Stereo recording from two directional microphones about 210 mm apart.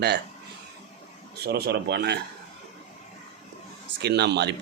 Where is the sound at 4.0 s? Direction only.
55° right (ahead or behind).